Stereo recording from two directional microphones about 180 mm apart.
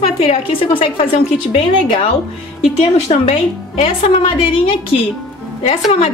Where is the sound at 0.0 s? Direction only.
35° left (ahead or behind).